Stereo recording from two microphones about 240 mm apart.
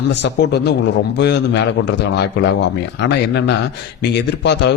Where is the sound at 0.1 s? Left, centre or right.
Left.